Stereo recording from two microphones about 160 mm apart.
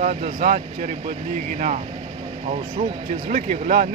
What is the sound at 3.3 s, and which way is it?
Speech, 60° right (ahead or behind).